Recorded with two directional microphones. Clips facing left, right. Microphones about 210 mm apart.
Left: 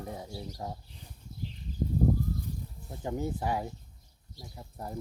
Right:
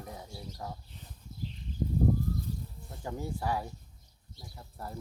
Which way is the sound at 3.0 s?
20° left (ahead or behind).